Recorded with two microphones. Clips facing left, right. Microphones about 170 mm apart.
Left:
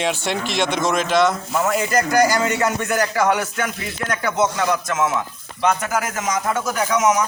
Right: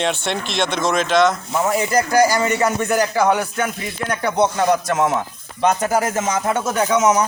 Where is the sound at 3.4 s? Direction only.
30° right (ahead or behind).